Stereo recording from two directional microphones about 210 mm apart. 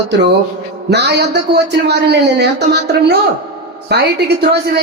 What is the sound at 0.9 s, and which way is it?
A man's voice, 50° right (ahead or behind).